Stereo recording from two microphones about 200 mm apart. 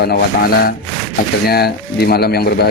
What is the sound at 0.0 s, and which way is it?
Speech, 50° left (ahead or behind).